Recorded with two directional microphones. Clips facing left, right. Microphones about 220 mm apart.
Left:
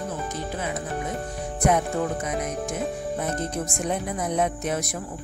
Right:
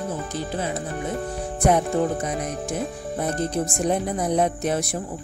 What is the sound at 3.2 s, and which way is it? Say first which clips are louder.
Speech: right 7 dB; 35° right (ahead or behind).